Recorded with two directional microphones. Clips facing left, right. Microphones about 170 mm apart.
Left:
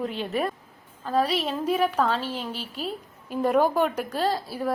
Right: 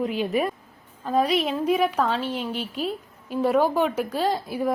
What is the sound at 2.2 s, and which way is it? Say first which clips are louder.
Speech: right 4 dB; 35° left (ahead or behind).